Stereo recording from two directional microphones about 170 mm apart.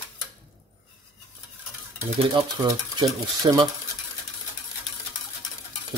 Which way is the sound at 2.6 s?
25° right (ahead or behind).